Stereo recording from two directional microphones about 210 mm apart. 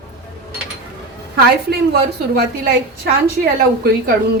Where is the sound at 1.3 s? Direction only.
50° right (ahead or behind).